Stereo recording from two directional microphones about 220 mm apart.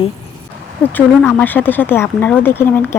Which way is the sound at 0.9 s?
5° left (ahead or behind).